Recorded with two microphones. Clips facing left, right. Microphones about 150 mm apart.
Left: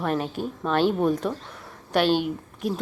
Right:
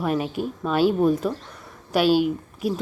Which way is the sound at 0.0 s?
5° right (ahead or behind).